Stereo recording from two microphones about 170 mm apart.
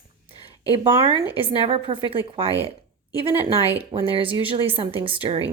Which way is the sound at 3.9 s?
25° right (ahead or behind).